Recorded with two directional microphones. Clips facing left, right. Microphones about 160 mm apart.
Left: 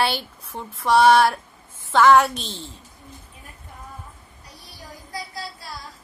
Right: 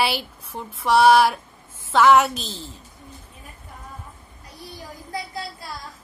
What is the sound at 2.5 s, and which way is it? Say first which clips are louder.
Speech: even; 30° left (ahead or behind).